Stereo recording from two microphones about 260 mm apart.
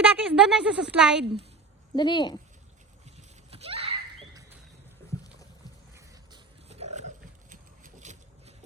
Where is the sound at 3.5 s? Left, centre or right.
Right.